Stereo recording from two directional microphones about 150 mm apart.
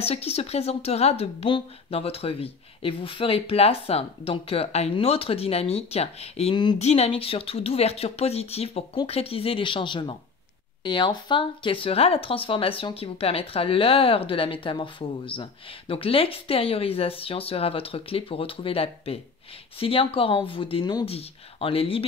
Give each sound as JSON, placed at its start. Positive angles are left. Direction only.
{"t": 0.0, "sound": "speech", "side_deg": 40}
{"t": 6.5, "sound": "speech", "side_deg": 30}
{"t": 6.8, "sound": "speech", "side_deg": 45}